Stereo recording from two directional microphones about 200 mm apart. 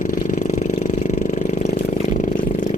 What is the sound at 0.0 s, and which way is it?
Vehicle, 40° left (ahead or behind).